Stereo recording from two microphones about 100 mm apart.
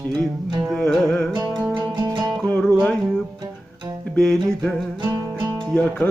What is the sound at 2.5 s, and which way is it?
Music, 10° left (ahead or behind).